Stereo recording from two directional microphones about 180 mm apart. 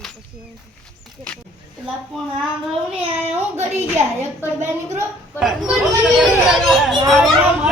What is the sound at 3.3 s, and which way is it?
Child singing, 40° right (ahead or behind).